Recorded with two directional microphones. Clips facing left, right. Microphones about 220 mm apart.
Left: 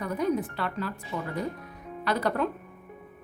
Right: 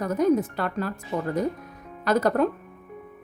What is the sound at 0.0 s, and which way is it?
Speech, 45° right (ahead or behind).